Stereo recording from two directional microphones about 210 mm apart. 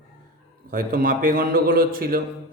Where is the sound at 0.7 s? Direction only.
40° right (ahead or behind).